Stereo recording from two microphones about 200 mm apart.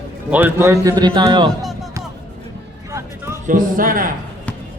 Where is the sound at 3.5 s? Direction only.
45° right (ahead or behind).